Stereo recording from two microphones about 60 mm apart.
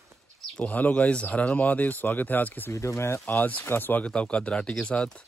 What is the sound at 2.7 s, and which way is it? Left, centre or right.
Speech, left.